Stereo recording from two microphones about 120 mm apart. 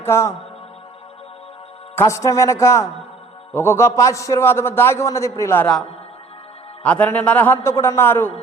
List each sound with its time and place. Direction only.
0.0 s a man's voice: 20° left (ahead or behind)
2.0 s a man's voice: 25° left (ahead or behind)
6.8 s a man's voice: 10° left (ahead or behind)